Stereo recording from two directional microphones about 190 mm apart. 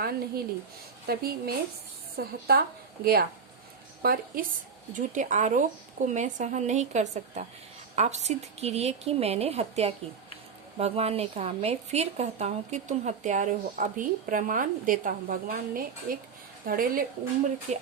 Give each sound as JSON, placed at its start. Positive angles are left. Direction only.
{"t": 0.0, "sound": "a woman's voice", "side_deg": -55}
{"t": 17.7, "sound": "a woman's voice", "side_deg": -35}